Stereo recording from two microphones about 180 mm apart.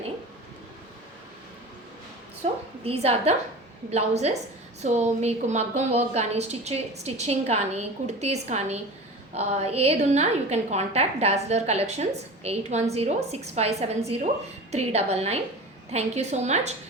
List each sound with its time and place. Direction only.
2.8 s a woman's voice: 35° right (ahead or behind)